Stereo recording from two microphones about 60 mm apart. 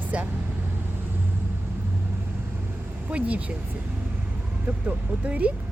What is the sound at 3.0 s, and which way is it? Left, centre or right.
Speech, right.